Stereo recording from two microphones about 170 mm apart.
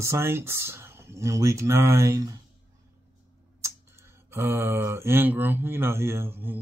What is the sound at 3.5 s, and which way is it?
Speech, 15° right (ahead or behind).